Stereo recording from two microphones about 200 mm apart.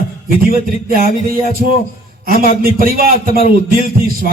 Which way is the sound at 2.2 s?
45° right (ahead or behind).